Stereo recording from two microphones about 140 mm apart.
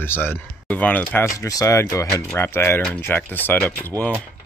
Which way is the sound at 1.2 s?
25° left (ahead or behind).